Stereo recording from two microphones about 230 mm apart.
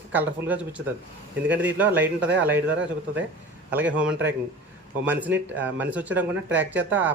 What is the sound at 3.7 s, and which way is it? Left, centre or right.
A man's voice, centre.